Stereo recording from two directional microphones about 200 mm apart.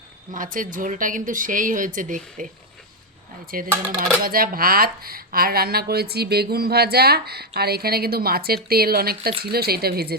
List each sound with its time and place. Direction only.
0.3 s speech: 40° right (ahead or behind)
3.5 s speech: 45° right (ahead or behind)